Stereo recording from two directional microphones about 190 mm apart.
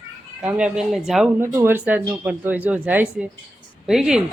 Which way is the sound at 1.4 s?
10° right (ahead or behind).